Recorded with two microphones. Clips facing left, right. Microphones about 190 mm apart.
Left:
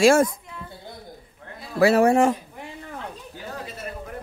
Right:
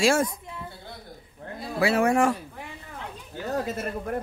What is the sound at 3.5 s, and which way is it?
Speech, 50° right (ahead or behind).